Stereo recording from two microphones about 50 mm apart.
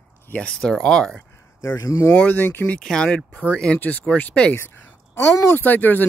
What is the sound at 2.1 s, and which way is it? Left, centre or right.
Speech, left.